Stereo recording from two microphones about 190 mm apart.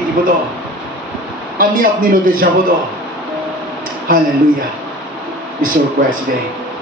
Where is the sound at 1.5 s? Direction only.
50° right (ahead or behind).